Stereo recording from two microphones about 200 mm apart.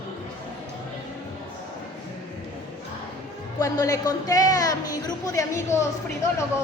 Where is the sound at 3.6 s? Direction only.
15° left (ahead or behind).